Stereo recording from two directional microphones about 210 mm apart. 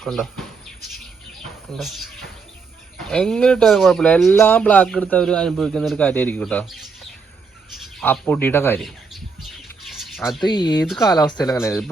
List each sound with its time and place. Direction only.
0.0 s speech: centre (ahead or behind)
1.7 s speech: centre (ahead or behind)
3.1 s speech: 5° left (ahead or behind)
10.4 s speech: 20° left (ahead or behind)
10.8 s speech: centre (ahead or behind)
11.1 s speech: 20° left (ahead or behind)